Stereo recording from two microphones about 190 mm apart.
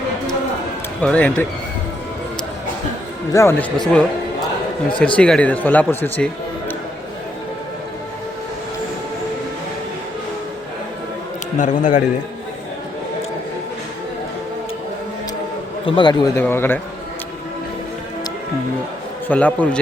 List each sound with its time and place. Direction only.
1.0 s a man's voice: 5° left (ahead or behind)
3.3 s a man's voice: 15° left (ahead or behind)
4.9 s a man's voice: 5° left (ahead or behind)
11.5 s a man's voice: 40° left (ahead or behind)
15.9 s a man's voice: 25° left (ahead or behind)
16.4 s a man's voice: 10° left (ahead or behind)
19.3 s a man's voice: 10° left (ahead or behind)